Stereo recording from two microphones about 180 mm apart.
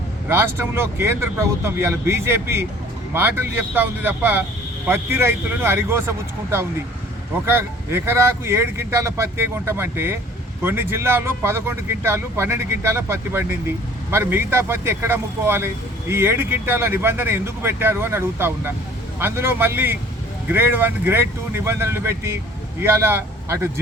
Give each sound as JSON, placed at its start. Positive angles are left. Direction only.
{"t": 0.3, "sound": "speech", "side_deg": -15}